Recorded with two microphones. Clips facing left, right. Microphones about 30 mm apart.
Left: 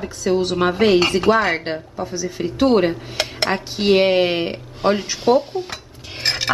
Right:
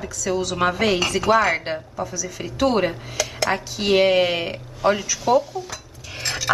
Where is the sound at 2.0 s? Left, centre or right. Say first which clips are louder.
Left 4 dB; left.